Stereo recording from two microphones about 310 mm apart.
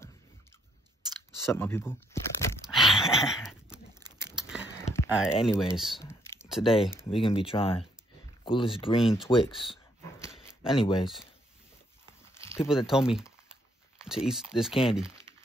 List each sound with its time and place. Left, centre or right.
1.4 s a sound: centre
5.3 s speech: centre
9.0 s speech: centre
10.5 s a sound: centre
10.8 s speech: centre
12.4 s biting: centre
12.6 s speech: centre
14.7 s speech: centre